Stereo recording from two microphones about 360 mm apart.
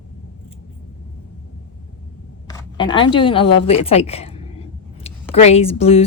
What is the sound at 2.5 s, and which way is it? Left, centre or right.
Speech, centre.